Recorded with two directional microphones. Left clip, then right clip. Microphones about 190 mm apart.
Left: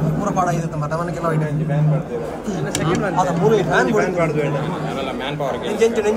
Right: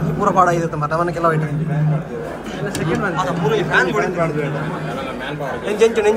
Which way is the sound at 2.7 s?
Centre (ahead or behind).